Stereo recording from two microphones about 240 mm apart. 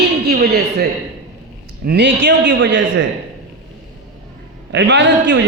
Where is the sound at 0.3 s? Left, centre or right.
Right.